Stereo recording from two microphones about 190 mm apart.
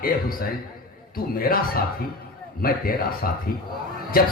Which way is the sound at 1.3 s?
50° left (ahead or behind).